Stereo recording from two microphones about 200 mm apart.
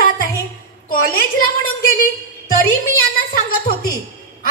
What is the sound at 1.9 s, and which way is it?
A woman's voice, 45° left (ahead or behind).